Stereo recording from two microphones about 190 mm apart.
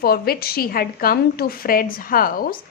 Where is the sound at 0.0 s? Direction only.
55° left (ahead or behind).